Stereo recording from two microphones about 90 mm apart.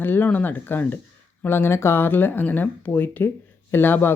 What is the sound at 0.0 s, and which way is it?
Speech, 20° left (ahead or behind).